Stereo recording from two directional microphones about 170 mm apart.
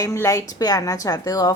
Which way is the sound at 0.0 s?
20° left (ahead or behind).